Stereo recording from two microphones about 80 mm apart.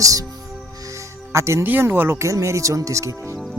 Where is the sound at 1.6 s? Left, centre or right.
Right.